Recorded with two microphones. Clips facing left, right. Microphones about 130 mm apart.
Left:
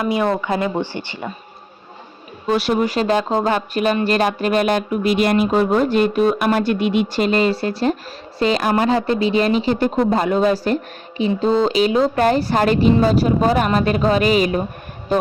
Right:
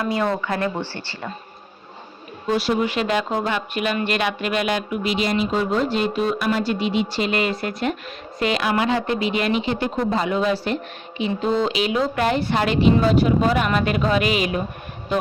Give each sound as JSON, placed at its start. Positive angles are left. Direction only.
{"t": 0.0, "sound": "speech", "side_deg": 15}
{"t": 2.5, "sound": "speech", "side_deg": 65}
{"t": 2.8, "sound": "speech", "side_deg": 35}
{"t": 7.3, "sound": "speech", "side_deg": 35}